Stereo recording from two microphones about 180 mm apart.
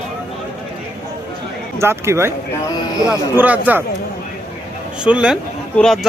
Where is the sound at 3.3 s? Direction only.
10° right (ahead or behind).